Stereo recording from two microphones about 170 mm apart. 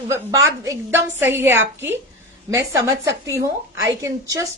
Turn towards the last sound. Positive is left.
turn(degrees=-15)  # may be behind; listen again after turning